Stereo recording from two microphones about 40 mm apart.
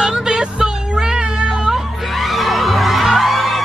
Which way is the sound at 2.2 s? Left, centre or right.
Centre.